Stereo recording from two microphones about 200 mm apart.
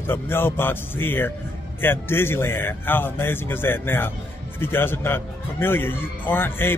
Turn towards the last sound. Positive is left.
turn(degrees=10)  # may be behind; listen again after turning